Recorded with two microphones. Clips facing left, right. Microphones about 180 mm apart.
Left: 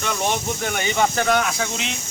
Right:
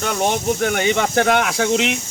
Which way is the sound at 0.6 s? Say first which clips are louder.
Right 3 dB; 60° right (ahead or behind).